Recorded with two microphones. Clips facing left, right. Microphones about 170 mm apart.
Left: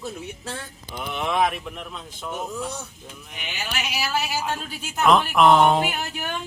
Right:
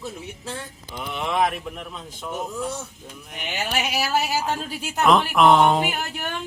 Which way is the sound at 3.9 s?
45° right (ahead or behind).